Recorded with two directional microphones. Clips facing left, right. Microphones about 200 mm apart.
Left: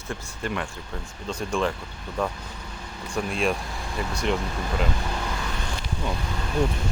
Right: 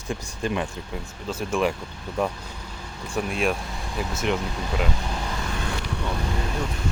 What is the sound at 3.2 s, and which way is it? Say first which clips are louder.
Speech: right 1 dB; centre (ahead or behind).